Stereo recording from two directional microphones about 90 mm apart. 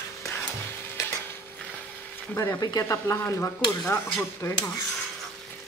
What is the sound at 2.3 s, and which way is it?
Speech, 40° left (ahead or behind).